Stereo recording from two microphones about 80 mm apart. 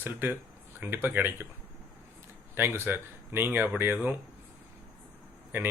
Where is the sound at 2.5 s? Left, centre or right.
Right.